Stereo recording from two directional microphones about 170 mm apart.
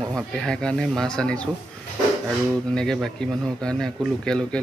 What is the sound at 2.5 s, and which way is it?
Speech, 5° left (ahead or behind).